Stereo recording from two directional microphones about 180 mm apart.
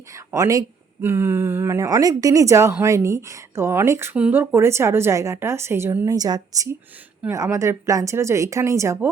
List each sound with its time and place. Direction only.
0.1 s speech: 15° right (ahead or behind)